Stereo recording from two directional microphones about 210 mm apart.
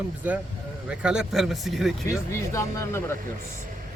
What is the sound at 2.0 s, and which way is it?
Speech, 15° left (ahead or behind).